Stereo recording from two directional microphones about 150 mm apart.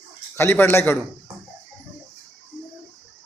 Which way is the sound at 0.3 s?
15° left (ahead or behind).